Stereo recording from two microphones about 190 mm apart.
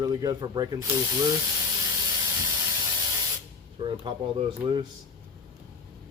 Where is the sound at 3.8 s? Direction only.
25° right (ahead or behind).